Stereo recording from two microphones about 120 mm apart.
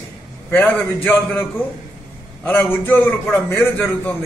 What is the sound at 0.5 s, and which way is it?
Speech, 15° left (ahead or behind).